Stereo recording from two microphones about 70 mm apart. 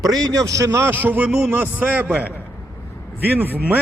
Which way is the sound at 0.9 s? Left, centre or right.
Right.